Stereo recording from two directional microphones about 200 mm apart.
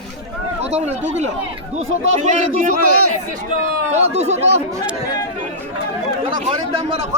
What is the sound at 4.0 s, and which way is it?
Speech, 35° right (ahead or behind).